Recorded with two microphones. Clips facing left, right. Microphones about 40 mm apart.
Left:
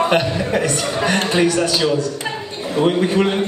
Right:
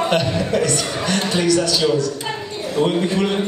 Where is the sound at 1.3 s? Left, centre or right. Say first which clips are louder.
Right 1 dB; centre.